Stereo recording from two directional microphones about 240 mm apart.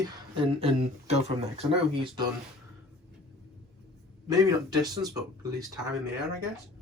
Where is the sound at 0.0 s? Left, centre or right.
Centre.